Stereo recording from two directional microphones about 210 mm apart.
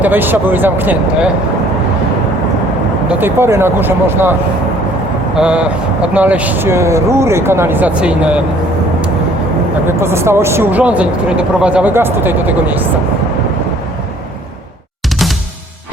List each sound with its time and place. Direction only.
0.0 s speech: 10° right (ahead or behind)
3.1 s speech: 10° right (ahead or behind)
5.4 s speech: 5° right (ahead or behind)
10.0 s speech: 10° right (ahead or behind)